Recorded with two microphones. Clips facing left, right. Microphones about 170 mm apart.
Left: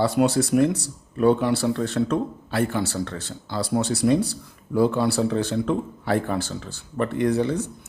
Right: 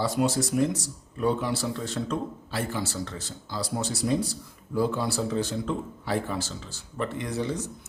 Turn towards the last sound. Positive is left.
turn(degrees=60)  # may be behind; listen again after turning